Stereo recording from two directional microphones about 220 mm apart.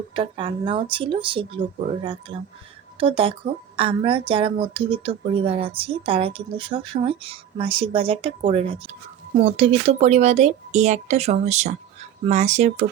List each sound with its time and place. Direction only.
0.2 s speech: 25° right (ahead or behind)